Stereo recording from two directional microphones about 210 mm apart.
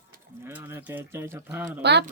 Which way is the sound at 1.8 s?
55° right (ahead or behind).